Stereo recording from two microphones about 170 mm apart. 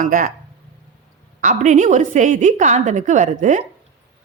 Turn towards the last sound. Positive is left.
turn(degrees=-45)  # may be behind; listen again after turning